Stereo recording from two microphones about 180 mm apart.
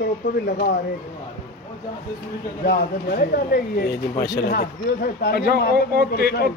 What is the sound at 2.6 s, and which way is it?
Speech, 60° left (ahead or behind).